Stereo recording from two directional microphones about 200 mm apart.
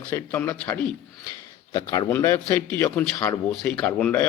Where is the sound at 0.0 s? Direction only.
10° left (ahead or behind).